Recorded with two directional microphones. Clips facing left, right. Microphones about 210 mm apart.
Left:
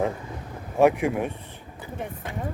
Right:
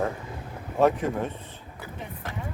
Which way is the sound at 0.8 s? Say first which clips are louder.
Left 3 dB; 10° left (ahead or behind).